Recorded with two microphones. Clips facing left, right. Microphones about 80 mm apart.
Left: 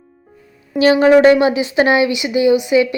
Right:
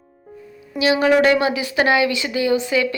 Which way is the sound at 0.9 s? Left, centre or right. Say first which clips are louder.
Left 6 dB; left.